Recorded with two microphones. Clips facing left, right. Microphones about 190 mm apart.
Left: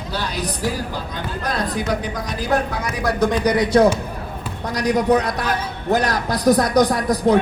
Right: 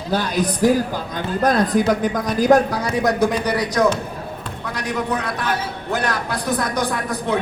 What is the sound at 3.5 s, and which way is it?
Speech, 25° left (ahead or behind).